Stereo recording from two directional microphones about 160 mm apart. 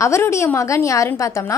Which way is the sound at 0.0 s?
20° left (ahead or behind).